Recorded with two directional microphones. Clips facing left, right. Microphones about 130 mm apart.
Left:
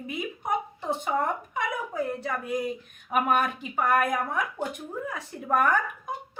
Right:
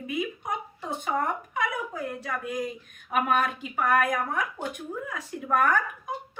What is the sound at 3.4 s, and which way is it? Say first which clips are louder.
Speech: even; 25° left (ahead or behind).